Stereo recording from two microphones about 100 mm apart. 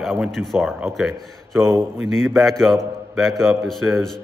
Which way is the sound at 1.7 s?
25° right (ahead or behind).